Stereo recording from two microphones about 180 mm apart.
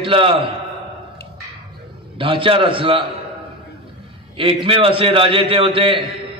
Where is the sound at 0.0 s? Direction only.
30° right (ahead or behind).